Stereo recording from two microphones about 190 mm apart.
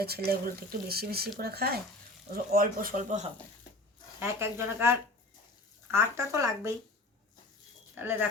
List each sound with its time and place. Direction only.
0.0 s speech: 55° right (ahead or behind)
4.2 s speech: 15° right (ahead or behind)
7.9 s speech: 10° right (ahead or behind)